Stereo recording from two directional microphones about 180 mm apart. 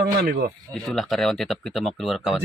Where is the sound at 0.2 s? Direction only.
60° right (ahead or behind).